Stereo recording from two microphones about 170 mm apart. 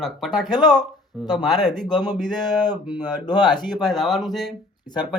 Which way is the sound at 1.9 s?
25° left (ahead or behind).